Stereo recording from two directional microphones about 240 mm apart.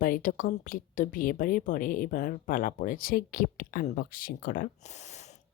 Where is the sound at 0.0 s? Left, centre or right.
Left.